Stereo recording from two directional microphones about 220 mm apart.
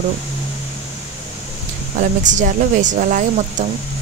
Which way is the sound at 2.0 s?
35° right (ahead or behind).